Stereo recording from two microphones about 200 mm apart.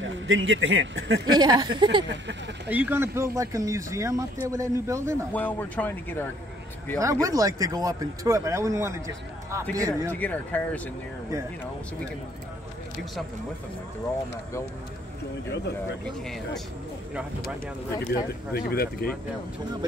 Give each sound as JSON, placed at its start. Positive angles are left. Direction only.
{"t": 0.0, "sound": "speech", "side_deg": -75}
{"t": 1.3, "sound": "speech", "side_deg": -20}
{"t": 2.0, "sound": "speech", "side_deg": -65}
{"t": 2.7, "sound": "speech", "side_deg": -10}
{"t": 5.3, "sound": "speech", "side_deg": 10}
{"t": 7.0, "sound": "speech", "side_deg": -15}
{"t": 10.1, "sound": "speech", "side_deg": 5}
{"t": 18.0, "sound": "speech", "side_deg": 50}